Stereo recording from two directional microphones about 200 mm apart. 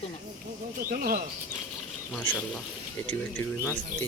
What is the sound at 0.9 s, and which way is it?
Speech, 45° right (ahead or behind).